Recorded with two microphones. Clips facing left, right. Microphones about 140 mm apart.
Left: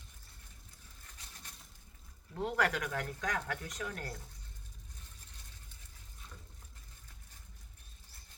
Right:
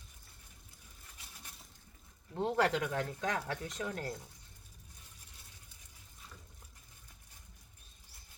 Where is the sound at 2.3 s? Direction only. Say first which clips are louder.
Right 2 dB; 25° right (ahead or behind).